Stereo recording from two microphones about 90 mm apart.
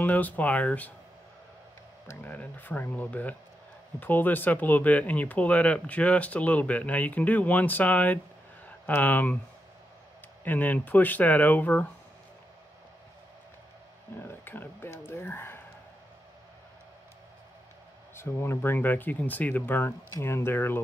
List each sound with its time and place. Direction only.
0.0 s speech: 15° left (ahead or behind)
2.2 s speech: 20° left (ahead or behind)
10.4 s speech: 20° left (ahead or behind)
14.1 s speech: 25° left (ahead or behind)
18.1 s speech: 30° left (ahead or behind)